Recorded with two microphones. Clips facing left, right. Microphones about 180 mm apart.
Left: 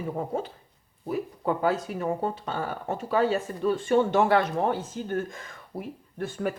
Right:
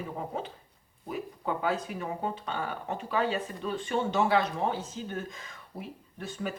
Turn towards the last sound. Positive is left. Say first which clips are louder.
# left 6 dB
turn(degrees=50)  # may be behind; listen again after turning